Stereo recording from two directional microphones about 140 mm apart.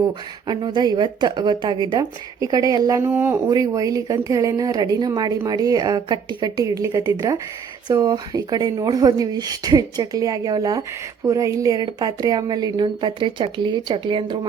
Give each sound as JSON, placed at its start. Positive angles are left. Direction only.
{"t": 0.4, "sound": "speech", "side_deg": -35}
{"t": 3.5, "sound": "a woman's voice", "side_deg": -25}